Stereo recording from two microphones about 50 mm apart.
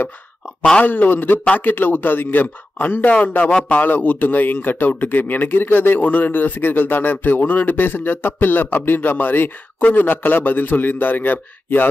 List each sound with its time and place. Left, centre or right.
0.8 s a man's voice: left
3.1 s a man's voice: left